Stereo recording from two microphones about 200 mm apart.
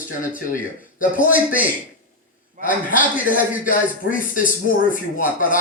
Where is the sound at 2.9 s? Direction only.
45° left (ahead or behind).